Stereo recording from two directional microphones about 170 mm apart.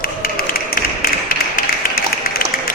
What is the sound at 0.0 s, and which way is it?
Tap, 60° left (ahead or behind).